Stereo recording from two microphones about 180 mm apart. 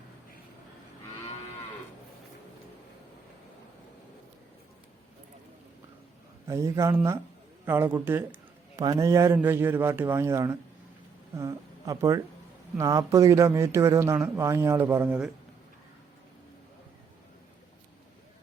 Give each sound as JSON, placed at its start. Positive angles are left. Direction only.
{"t": 6.5, "sound": "a man's voice", "side_deg": -15}